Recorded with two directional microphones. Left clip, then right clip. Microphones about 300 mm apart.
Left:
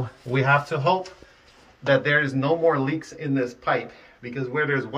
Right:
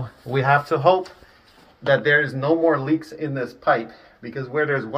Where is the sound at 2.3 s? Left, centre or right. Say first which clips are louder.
Right 2 dB; centre.